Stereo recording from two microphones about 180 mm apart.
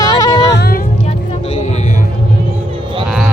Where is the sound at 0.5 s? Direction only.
65° left (ahead or behind).